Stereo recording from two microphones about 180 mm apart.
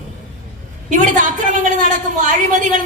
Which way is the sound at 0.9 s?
45° right (ahead or behind).